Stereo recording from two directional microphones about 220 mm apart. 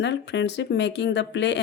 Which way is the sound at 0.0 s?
50° left (ahead or behind).